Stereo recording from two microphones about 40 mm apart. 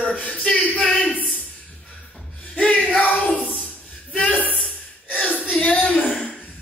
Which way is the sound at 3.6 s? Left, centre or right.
Left.